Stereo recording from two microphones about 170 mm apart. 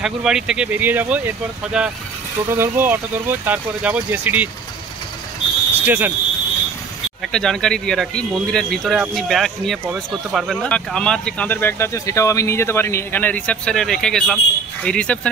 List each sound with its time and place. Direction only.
0.0 s speech: 5° right (ahead or behind)
5.7 s squeal: 10° right (ahead or behind)
7.3 s speech: 5° left (ahead or behind)